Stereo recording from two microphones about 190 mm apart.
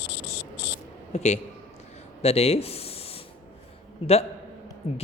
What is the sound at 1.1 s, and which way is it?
Speech, 35° left (ahead or behind).